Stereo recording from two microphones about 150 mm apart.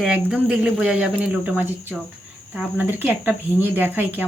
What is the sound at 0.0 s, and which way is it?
Speech, 5° right (ahead or behind).